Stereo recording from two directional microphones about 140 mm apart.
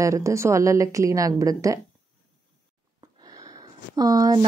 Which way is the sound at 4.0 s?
25° right (ahead or behind).